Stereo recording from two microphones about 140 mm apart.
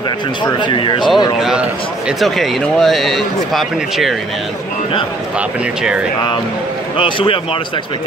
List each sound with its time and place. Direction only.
0.4 s speech: 35° left (ahead or behind)
1.4 s a man's voice: 5° right (ahead or behind)
7.0 s speech: 35° left (ahead or behind)